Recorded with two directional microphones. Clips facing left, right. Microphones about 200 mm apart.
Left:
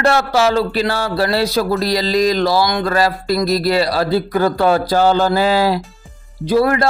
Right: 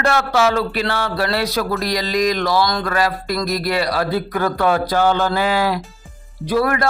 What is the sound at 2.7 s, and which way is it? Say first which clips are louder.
Speech: left 3 dB; 20° left (ahead or behind).